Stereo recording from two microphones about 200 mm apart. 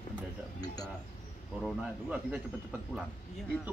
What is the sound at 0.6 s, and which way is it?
Speech, 20° left (ahead or behind).